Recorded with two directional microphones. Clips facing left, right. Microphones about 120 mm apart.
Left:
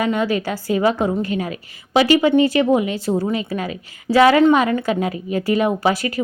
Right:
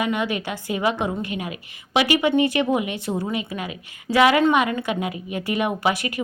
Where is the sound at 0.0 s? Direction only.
35° left (ahead or behind).